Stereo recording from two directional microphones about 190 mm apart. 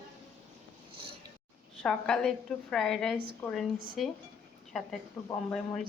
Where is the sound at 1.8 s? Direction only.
5° left (ahead or behind).